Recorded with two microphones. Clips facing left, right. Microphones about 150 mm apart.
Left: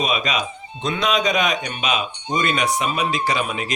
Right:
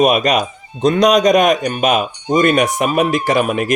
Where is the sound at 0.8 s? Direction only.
40° right (ahead or behind).